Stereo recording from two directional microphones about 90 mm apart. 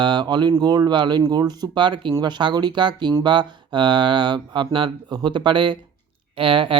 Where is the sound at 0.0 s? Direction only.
60° right (ahead or behind).